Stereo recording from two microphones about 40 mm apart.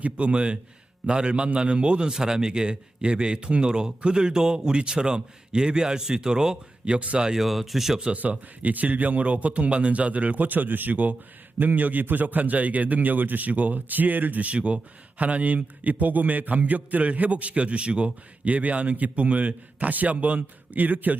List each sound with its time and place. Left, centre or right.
0.0 s a man's voice: right
6.8 s a man's voice: right
7.3 s speech: centre
8.1 s a man's voice: right